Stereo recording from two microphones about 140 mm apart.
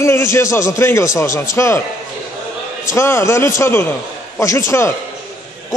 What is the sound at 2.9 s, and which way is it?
A man's voice, 20° left (ahead or behind).